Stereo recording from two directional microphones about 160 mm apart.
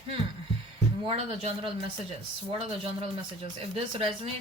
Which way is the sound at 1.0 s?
35° right (ahead or behind).